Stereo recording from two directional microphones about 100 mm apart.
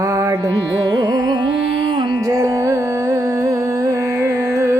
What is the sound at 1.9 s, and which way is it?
Music, 45° right (ahead or behind).